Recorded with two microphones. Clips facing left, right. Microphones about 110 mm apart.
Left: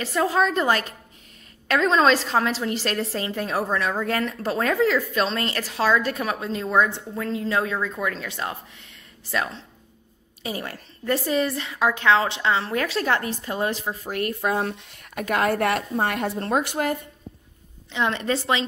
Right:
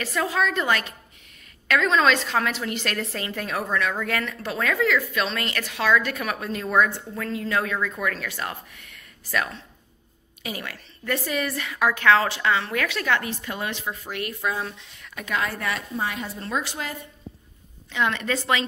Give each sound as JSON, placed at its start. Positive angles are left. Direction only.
{"t": 0.0, "sound": "a woman's voice", "side_deg": 30}
{"t": 17.9, "sound": "speech", "side_deg": 30}